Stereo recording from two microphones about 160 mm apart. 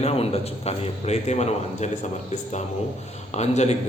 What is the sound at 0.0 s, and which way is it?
A man's voice, 40° left (ahead or behind).